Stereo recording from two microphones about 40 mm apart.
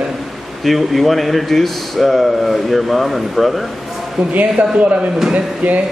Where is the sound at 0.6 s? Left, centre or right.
Centre.